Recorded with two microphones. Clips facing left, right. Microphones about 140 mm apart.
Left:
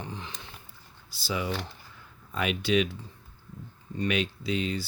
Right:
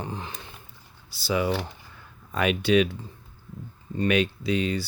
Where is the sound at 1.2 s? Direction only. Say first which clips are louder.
Right 6 dB; 70° right (ahead or behind).